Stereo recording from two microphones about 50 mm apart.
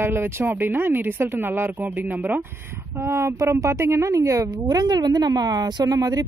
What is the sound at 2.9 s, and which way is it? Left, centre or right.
Speech, right.